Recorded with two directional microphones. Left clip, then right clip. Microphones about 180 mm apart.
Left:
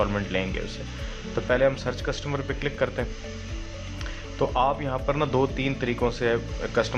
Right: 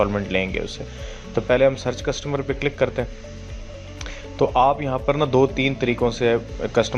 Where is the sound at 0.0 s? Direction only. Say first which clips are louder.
Right 5 dB; 20° right (ahead or behind).